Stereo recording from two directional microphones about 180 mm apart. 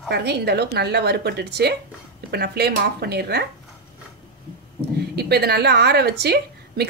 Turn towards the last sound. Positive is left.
turn(degrees=-65)  # may be behind; listen again after turning